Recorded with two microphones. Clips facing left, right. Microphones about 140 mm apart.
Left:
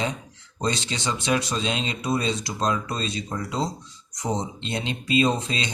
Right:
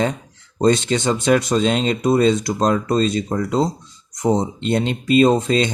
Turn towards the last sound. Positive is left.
turn(degrees=-50)  # may be behind; listen again after turning